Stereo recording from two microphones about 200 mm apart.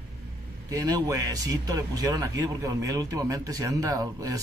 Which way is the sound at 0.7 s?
15° right (ahead or behind).